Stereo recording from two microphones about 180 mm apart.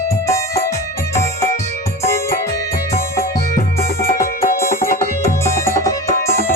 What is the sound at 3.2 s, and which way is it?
Music, 50° left (ahead or behind).